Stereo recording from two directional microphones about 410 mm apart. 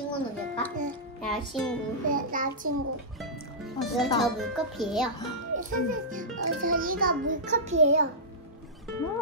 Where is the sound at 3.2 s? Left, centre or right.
Centre.